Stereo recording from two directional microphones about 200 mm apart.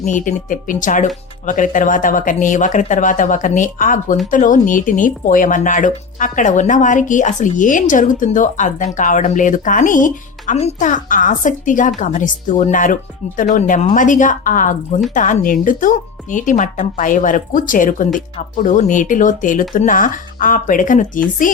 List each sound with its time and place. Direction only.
0.0 s speech: 40° left (ahead or behind)